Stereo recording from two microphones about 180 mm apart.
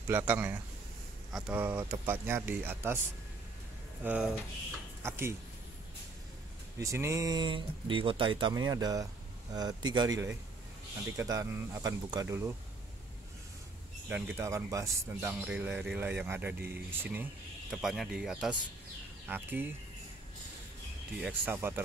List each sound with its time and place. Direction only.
0.1 s speech: 10° right (ahead or behind)
4.0 s speech: 10° right (ahead or behind)
6.8 s speech: 15° right (ahead or behind)
14.0 s speech: 10° right (ahead or behind)
21.2 s speech: 10° right (ahead or behind)